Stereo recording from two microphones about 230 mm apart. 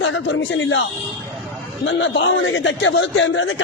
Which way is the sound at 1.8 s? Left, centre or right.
Left.